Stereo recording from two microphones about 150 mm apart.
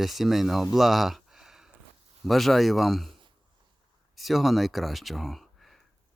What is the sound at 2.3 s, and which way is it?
Speech, centre (ahead or behind).